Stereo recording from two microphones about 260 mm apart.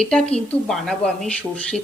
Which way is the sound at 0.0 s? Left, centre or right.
Centre.